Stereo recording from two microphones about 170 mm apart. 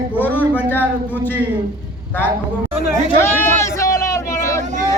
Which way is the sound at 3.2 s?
15° left (ahead or behind).